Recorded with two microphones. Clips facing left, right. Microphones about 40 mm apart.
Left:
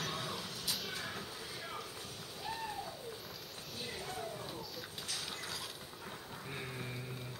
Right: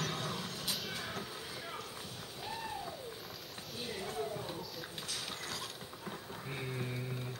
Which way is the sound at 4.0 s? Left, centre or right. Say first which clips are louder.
Right 6 dB; centre.